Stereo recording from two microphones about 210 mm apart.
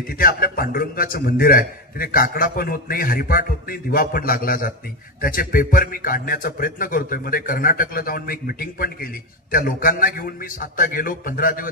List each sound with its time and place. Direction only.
0.1 s a man's voice: 45° left (ahead or behind)